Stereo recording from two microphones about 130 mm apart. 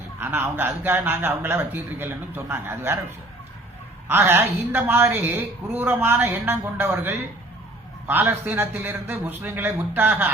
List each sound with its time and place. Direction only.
0.2 s a woman's voice: 15° right (ahead or behind)
4.1 s a woman's voice: 20° right (ahead or behind)